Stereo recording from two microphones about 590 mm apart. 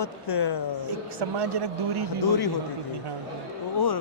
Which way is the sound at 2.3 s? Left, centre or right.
Left.